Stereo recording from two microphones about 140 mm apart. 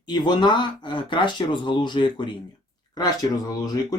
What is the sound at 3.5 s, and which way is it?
Speech, 30° left (ahead or behind).